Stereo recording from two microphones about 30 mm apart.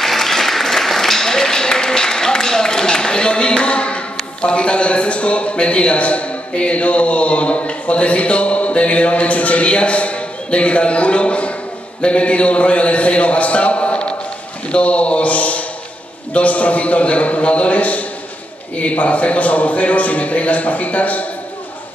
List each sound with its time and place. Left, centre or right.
0.0 s applause: centre
1.5 s a man's voice: left